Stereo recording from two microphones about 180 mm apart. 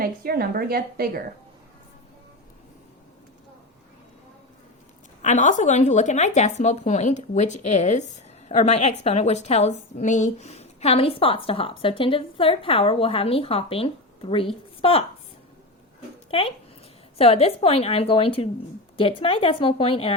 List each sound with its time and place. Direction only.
0.0 s a woman's voice: 55° right (ahead or behind)
5.2 s a woman's voice: 45° left (ahead or behind)
16.3 s speech: 30° left (ahead or behind)